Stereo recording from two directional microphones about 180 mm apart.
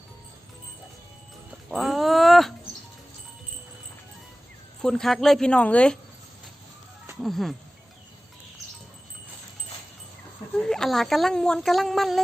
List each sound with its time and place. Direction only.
1.7 s a sound: centre (ahead or behind)
4.8 s speech: 5° left (ahead or behind)
7.2 s speech: centre (ahead or behind)
10.5 s a woman's voice: 5° left (ahead or behind)